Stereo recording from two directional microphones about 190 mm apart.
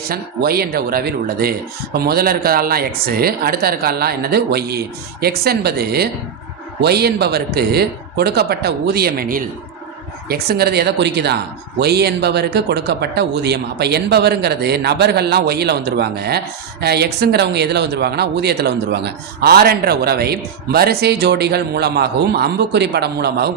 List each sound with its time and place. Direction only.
0.1 s speech: 55° right (ahead or behind)